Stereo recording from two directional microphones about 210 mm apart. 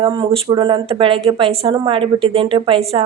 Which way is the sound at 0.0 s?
25° right (ahead or behind).